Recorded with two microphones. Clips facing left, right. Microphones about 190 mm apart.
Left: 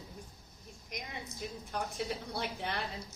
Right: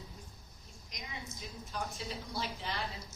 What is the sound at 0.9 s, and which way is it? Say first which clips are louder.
A woman's voice: left 3 dB; 60° left (ahead or behind).